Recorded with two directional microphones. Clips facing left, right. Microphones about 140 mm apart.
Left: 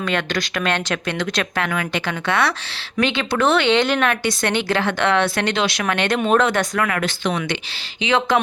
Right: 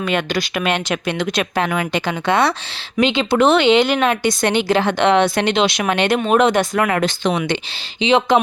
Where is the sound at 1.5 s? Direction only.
25° right (ahead or behind); by 4.0 s 5° right (ahead or behind).